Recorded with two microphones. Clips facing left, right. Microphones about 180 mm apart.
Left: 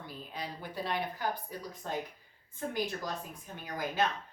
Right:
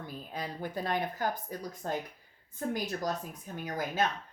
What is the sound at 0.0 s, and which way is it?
Speech, 50° right (ahead or behind).